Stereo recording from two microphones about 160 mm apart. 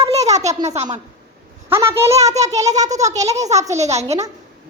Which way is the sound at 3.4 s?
45° right (ahead or behind).